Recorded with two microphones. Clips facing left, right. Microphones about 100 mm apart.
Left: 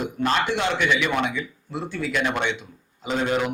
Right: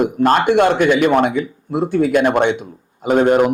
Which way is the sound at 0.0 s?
45° right (ahead or behind).